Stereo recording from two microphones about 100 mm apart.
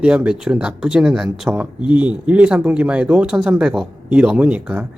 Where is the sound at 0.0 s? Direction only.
10° right (ahead or behind).